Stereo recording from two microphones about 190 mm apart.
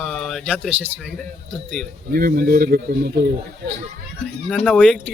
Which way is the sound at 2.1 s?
55° right (ahead or behind).